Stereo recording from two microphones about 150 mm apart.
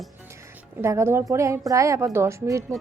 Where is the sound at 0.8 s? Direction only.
20° right (ahead or behind).